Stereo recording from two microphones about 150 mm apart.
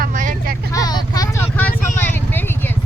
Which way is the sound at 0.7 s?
25° left (ahead or behind).